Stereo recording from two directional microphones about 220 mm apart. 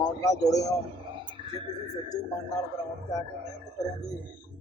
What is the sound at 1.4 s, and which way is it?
Music, 25° right (ahead or behind).